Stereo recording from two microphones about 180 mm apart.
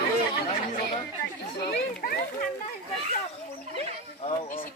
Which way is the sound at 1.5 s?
60° left (ahead or behind).